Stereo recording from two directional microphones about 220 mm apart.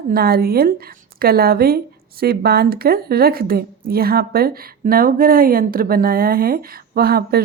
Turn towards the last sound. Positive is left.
turn(degrees=-45)  # may be behind; listen again after turning